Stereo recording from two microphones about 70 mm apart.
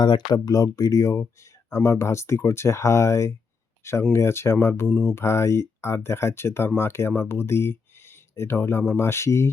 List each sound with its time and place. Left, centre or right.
0.0 s speech: left